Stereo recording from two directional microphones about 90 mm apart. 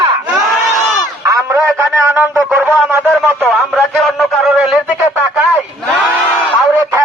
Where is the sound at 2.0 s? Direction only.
20° right (ahead or behind).